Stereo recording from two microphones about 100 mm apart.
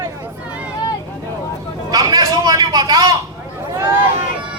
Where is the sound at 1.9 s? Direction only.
40° right (ahead or behind).